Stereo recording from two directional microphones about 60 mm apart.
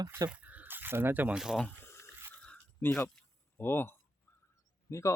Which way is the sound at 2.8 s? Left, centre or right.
Left.